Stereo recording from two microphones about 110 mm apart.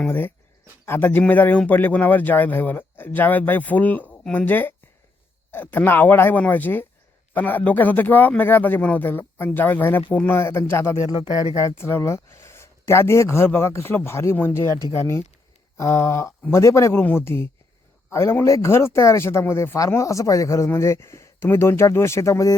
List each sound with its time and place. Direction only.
0.1 s speech: 20° left (ahead or behind)